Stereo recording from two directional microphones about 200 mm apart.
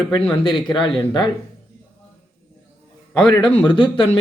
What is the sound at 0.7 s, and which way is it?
Speech, 25° left (ahead or behind).